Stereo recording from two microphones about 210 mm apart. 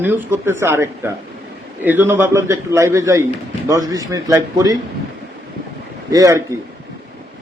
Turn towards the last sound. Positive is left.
turn(degrees=-15)  # may be behind; listen again after turning